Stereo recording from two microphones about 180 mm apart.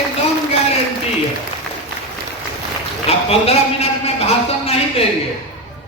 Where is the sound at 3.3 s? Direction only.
35° left (ahead or behind).